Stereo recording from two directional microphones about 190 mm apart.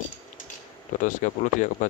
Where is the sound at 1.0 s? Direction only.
40° left (ahead or behind).